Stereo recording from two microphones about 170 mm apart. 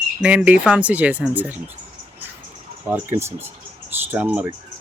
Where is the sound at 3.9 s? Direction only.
10° right (ahead or behind).